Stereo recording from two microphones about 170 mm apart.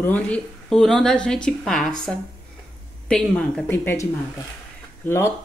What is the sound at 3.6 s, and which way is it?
Speech, 15° left (ahead or behind).